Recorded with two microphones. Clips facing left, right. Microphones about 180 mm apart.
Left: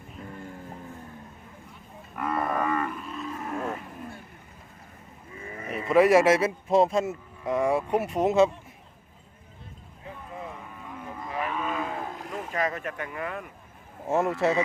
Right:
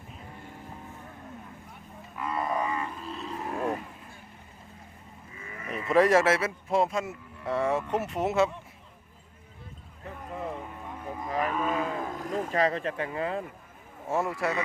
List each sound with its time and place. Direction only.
2.1 s livestock: 55° left (ahead or behind)
3.1 s roaring cats: 35° right (ahead or behind)
5.3 s livestock: 35° left (ahead or behind)
5.9 s a man's voice: 10° left (ahead or behind); by 7.2 s 25° left (ahead or behind)
7.4 s speech: 10° left (ahead or behind)
11.3 s roaring cats: 40° right (ahead or behind)
14.1 s a man's voice: 20° left (ahead or behind)